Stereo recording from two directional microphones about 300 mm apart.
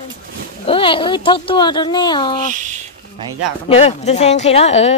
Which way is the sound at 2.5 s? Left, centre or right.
Right.